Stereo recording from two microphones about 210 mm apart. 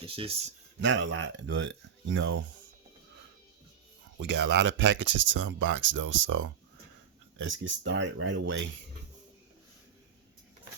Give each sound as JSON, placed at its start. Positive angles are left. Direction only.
{"t": 0.0, "sound": "speech", "side_deg": -25}
{"t": 0.8, "sound": "speech", "side_deg": -60}
{"t": 4.2, "sound": "speech", "side_deg": -55}